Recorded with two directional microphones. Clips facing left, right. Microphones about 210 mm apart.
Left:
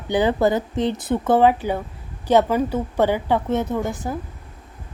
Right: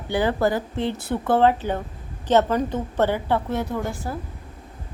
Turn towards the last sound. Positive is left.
turn(degrees=20)  # may be behind; listen again after turning